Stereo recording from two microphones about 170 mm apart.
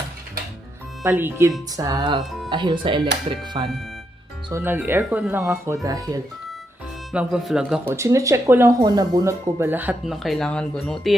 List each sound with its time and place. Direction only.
1.0 s speech: 15° right (ahead or behind)
4.5 s speech: 10° right (ahead or behind)
7.1 s speech: 5° right (ahead or behind)
10.2 s speech: centre (ahead or behind)